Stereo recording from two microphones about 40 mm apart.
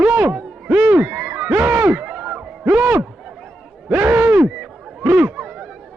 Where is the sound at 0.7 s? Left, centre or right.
Right.